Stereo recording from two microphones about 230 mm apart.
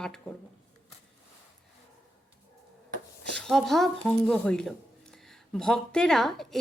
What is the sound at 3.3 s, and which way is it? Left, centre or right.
Speech, centre.